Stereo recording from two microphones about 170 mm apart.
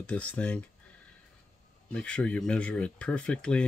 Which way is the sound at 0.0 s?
10° left (ahead or behind).